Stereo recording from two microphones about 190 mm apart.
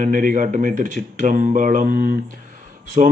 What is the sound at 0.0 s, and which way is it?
A man's voice, 45° right (ahead or behind).